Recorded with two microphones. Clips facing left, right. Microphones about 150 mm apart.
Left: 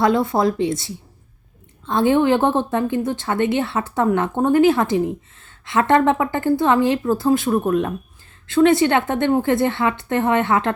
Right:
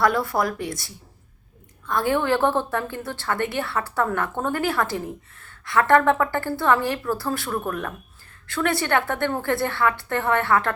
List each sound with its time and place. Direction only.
0.0 s a woman's voice: 20° left (ahead or behind)